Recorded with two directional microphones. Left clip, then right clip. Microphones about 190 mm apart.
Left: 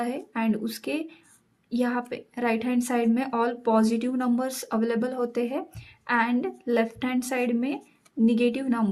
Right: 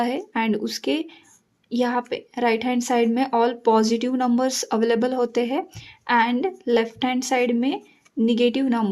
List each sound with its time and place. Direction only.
0.0 s speech: 25° right (ahead or behind)